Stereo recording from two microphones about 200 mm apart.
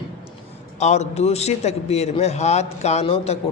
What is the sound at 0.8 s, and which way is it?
A man's voice, 35° left (ahead or behind).